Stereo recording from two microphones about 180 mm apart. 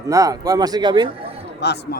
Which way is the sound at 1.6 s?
70° left (ahead or behind).